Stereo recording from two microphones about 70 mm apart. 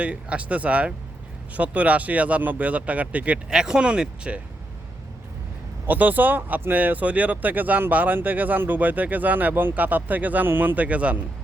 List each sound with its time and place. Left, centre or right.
0.0 s speech: centre
3.5 s speech: centre
5.8 s speech: right